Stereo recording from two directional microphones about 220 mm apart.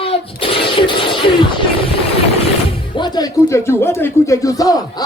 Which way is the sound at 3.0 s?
20° left (ahead or behind).